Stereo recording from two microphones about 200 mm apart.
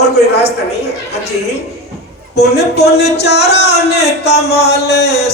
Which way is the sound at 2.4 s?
55° left (ahead or behind).